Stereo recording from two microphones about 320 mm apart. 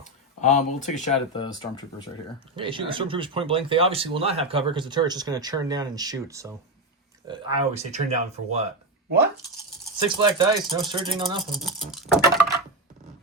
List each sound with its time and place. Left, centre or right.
0.4 s speech: left
2.6 s speech: centre
9.0 s speech: right
10.3 s speech: centre
11.5 s patter: centre